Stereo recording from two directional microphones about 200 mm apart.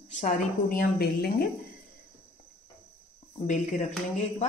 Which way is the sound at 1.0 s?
50° left (ahead or behind).